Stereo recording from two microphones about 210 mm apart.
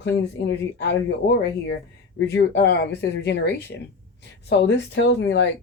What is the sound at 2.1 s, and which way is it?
Speech, 55° left (ahead or behind).